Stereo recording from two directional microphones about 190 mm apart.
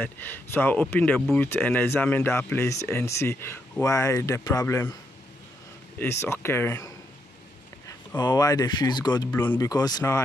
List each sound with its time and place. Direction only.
0.0 s speech: 10° left (ahead or behind)
5.9 s speech: 10° left (ahead or behind)
8.2 s speech: 20° left (ahead or behind)